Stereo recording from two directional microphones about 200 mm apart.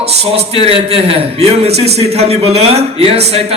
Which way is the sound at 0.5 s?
30° right (ahead or behind).